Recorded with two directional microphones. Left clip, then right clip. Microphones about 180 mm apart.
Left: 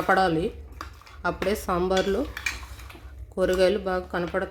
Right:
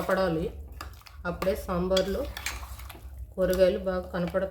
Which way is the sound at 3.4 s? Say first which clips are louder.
Left 2 dB; 50° left (ahead or behind).